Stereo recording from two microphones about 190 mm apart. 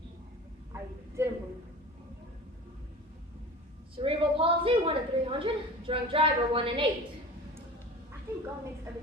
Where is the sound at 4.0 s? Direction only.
30° right (ahead or behind).